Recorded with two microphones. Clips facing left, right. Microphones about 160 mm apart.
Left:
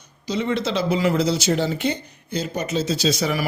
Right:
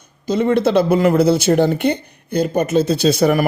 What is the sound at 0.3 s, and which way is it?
Speech, 50° right (ahead or behind).